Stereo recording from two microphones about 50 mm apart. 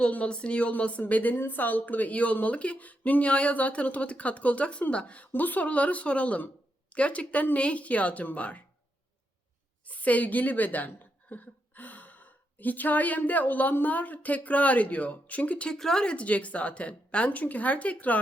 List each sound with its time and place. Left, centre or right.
0.0 s speech: left
5.3 s speech: left
9.8 s a woman's voice: left
15.7 s speech: centre
16.1 s speech: left